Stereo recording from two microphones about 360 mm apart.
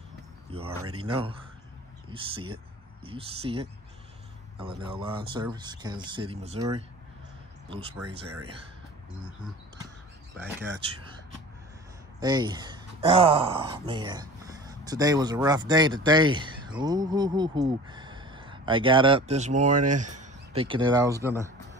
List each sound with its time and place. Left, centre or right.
0.5 s speech: centre
8.0 s speech: right
10.3 s speech: centre
12.2 s speech: centre